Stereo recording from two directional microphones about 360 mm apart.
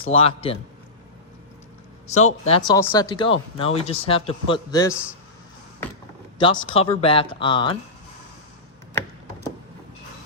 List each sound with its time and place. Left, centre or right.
0.0 s speech: centre
2.1 s speech: centre
6.4 s speech: centre